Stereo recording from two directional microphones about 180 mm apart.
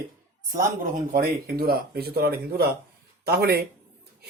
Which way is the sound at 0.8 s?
50° right (ahead or behind).